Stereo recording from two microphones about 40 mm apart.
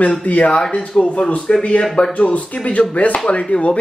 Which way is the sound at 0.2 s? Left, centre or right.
Left.